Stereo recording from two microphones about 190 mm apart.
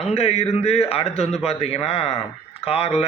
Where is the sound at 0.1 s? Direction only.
30° left (ahead or behind).